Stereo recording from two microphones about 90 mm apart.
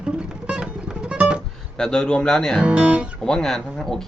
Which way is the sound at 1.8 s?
5° left (ahead or behind).